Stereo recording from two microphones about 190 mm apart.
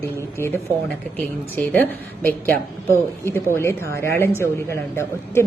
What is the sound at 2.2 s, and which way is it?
Speech, 50° right (ahead or behind).